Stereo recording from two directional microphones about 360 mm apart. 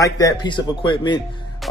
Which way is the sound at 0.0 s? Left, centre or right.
Centre.